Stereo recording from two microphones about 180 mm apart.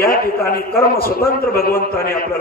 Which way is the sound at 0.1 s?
55° left (ahead or behind).